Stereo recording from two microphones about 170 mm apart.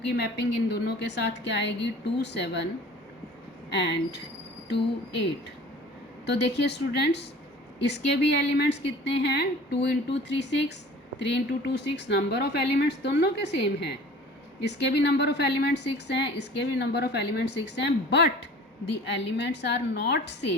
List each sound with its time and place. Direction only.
0.1 s speech: 75° left (ahead or behind)
3.7 s speech: 90° left
6.2 s a woman's voice: 80° left